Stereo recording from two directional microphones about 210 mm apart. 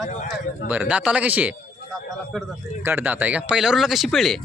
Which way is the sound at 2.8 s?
10° right (ahead or behind).